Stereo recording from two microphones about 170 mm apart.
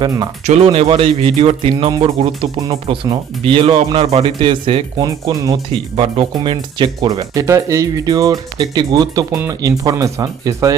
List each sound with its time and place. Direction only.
0.0 s speech: 20° right (ahead or behind)
0.4 s speech: 40° right (ahead or behind)
5.3 s speech: 20° right (ahead or behind)
6.0 s speech: 30° right (ahead or behind)